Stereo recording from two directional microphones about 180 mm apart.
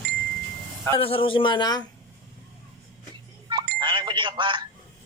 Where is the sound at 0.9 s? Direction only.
30° left (ahead or behind).